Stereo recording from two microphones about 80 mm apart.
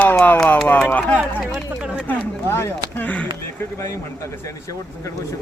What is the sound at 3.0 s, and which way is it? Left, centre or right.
Speech, centre.